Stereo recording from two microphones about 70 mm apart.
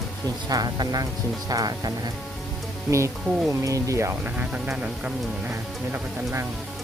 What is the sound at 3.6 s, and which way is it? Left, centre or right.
Speech, right.